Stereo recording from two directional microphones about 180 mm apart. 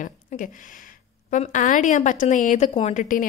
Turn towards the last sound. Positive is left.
turn(degrees=45)  # may be behind; listen again after turning